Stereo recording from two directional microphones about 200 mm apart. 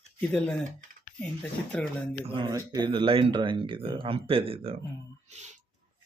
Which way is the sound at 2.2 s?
25° right (ahead or behind).